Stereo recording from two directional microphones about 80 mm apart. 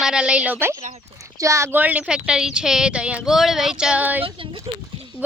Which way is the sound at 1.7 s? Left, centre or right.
Right.